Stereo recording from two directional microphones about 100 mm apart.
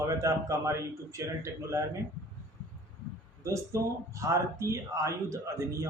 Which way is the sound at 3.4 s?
30° right (ahead or behind).